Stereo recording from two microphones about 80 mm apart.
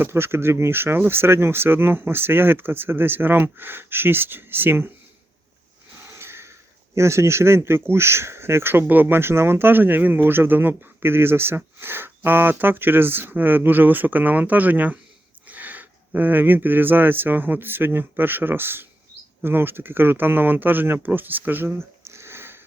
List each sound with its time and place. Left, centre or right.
0.0 s speech: right
6.1 s a sound: right
6.9 s speech: right